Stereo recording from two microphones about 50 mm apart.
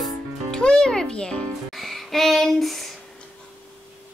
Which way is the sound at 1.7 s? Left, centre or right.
Centre.